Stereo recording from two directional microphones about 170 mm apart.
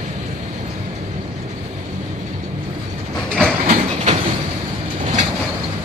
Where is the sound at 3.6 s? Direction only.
45° right (ahead or behind).